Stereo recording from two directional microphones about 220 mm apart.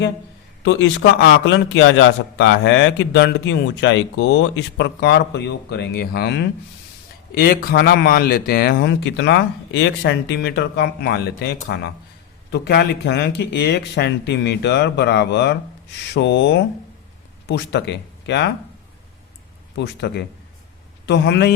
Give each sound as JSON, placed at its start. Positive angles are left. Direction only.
{"t": 0.6, "sound": "a man's voice", "side_deg": 60}
{"t": 19.7, "sound": "a man's voice", "side_deg": 50}